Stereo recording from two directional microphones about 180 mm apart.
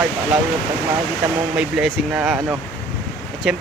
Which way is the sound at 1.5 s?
5° right (ahead or behind).